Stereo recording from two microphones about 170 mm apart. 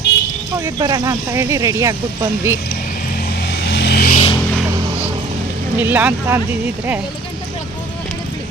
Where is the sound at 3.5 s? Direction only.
90° left; by 4.2 s 65° left (ahead or behind).